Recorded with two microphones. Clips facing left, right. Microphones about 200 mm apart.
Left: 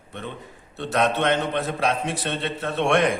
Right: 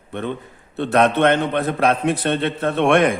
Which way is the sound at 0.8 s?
60° right (ahead or behind).